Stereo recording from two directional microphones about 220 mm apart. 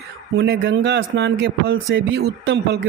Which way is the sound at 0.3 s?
50° right (ahead or behind).